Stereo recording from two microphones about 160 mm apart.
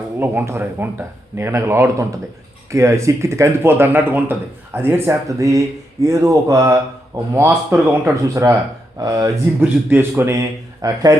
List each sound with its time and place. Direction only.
0.2 s speech: 15° right (ahead or behind)